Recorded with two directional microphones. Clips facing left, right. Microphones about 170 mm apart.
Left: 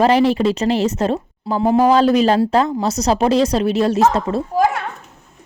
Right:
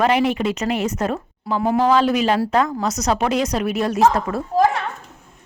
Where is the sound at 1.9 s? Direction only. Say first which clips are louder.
Left 4 dB; 35° left (ahead or behind).